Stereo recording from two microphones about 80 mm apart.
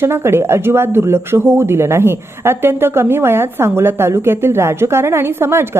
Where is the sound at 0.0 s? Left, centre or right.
Right.